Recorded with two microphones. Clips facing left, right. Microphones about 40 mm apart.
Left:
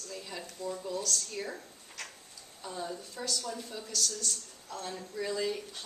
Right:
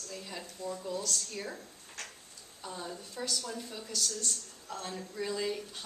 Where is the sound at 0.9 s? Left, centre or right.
Centre.